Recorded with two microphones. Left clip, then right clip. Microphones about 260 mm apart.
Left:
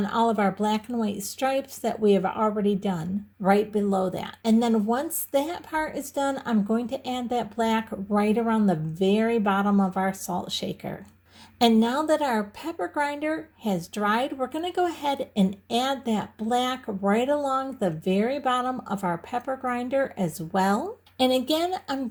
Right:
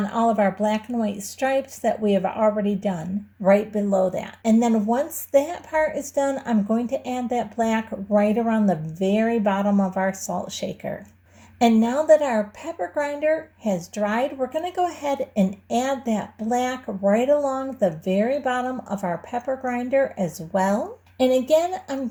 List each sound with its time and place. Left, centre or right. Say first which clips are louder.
0.1 s speech: right 3 dB; left